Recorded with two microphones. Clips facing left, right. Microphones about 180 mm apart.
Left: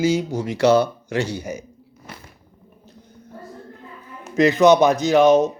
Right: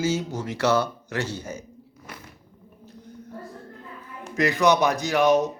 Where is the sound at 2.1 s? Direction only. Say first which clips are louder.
Left 2 dB; 30° left (ahead or behind).